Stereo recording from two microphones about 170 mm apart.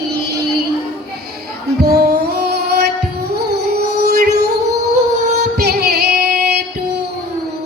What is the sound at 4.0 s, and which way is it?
Music, 70° right (ahead or behind).